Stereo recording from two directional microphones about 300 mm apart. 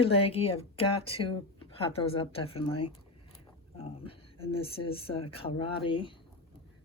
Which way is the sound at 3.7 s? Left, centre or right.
Centre.